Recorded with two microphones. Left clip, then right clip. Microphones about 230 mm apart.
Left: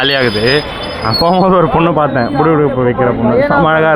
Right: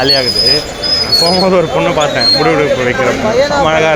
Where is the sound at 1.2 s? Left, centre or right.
Left.